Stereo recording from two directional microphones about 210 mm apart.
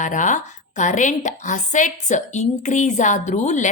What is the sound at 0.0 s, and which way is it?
A woman's voice, 35° left (ahead or behind).